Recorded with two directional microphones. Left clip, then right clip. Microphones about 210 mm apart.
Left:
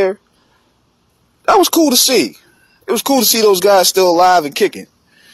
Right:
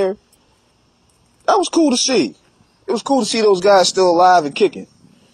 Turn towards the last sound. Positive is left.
turn(degrees=40)  # may be behind; listen again after turning